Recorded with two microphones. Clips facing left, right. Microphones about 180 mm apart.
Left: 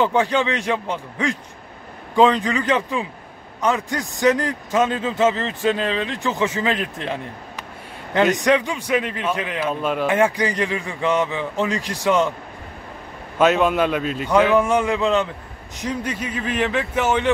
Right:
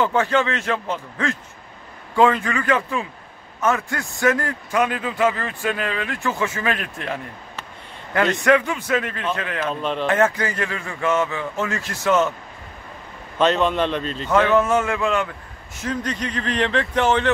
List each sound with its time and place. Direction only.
0.0 s a man's voice: 15° left (ahead or behind)
13.4 s a man's voice: 5° left (ahead or behind)